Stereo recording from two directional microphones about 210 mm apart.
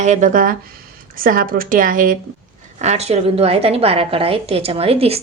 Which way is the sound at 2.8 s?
30° right (ahead or behind).